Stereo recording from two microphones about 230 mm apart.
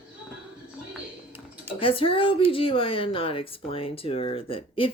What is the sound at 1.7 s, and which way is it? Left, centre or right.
A woman's voice, left.